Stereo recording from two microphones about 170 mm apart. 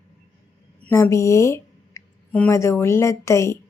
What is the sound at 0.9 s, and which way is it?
A woman's voice, 15° left (ahead or behind).